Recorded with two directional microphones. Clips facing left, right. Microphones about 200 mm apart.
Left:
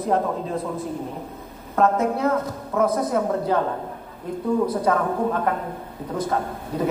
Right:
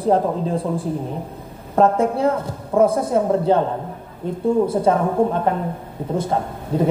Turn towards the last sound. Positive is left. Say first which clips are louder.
# right 4 dB
turn(degrees=-25)  # may be behind; listen again after turning